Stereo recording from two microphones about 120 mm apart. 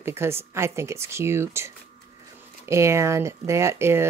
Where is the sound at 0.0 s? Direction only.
20° right (ahead or behind).